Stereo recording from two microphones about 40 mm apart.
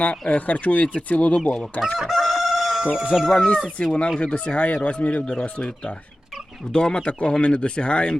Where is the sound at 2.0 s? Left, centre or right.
Centre.